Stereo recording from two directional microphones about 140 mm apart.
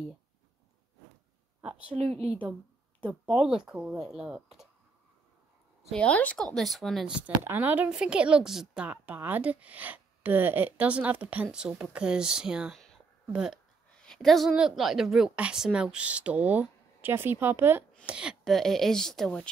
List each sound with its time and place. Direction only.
1.7 s a woman's voice: 10° right (ahead or behind)
2.0 s speech: 50° right (ahead or behind)
3.0 s speech: 5° right (ahead or behind)
5.9 s a woman's voice: 10° left (ahead or behind)